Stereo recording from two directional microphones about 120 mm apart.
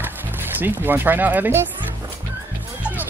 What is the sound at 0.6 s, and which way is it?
Speech, 15° right (ahead or behind).